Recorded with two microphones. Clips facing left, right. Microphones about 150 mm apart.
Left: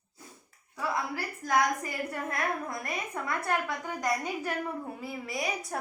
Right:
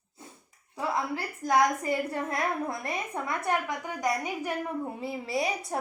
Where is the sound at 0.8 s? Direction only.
25° right (ahead or behind).